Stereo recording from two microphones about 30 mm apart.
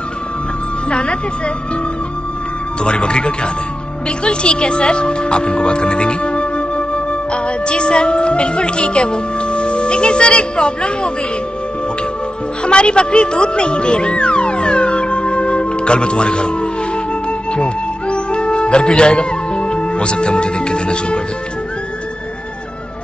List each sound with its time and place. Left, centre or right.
0.8 s speech: left
2.8 s speech: left
12.6 s music: left